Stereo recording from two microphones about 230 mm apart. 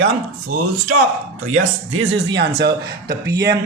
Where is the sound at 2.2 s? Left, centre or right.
Right.